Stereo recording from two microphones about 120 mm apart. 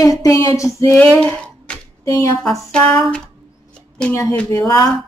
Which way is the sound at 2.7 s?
5° left (ahead or behind).